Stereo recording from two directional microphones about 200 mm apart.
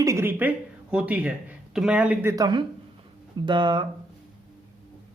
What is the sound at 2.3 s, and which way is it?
Speech, 20° right (ahead or behind).